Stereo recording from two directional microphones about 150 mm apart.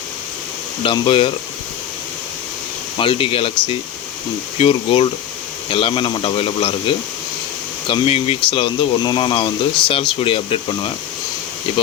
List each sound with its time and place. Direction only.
0.8 s speech: 35° left (ahead or behind)
3.0 s speech: 35° left (ahead or behind)
4.5 s speech: 40° left (ahead or behind)